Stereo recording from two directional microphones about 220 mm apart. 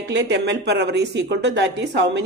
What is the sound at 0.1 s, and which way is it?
Speech, 50° right (ahead or behind).